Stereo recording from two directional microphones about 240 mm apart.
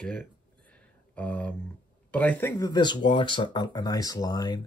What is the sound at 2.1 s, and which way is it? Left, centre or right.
Speech, centre.